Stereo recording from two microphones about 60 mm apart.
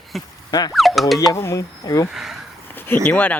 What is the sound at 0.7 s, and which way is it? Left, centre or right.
Speech, centre.